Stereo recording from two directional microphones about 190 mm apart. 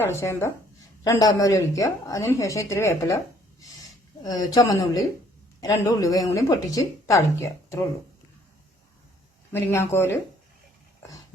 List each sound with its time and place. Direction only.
0.0 s speech: 15° left (ahead or behind)
4.2 s speech: 20° left (ahead or behind)
9.5 s speech: 10° left (ahead or behind)